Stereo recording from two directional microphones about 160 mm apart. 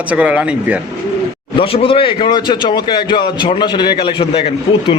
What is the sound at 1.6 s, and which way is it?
A man's voice, 35° left (ahead or behind).